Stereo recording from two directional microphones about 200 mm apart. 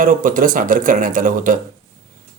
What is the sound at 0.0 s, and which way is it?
Speech, 40° right (ahead or behind).